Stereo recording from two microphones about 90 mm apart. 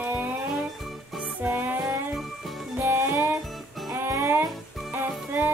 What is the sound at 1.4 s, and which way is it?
Music, 20° right (ahead or behind).